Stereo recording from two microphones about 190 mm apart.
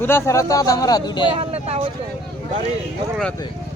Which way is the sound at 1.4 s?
30° right (ahead or behind).